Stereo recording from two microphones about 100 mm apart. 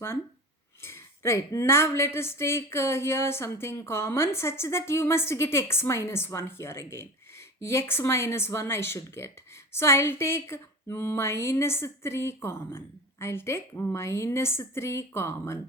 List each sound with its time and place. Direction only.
0.8 s speech: 25° left (ahead or behind)